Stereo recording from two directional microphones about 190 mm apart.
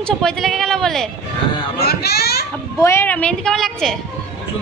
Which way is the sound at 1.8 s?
55° left (ahead or behind).